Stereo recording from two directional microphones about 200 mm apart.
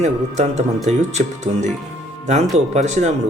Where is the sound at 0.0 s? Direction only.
35° right (ahead or behind).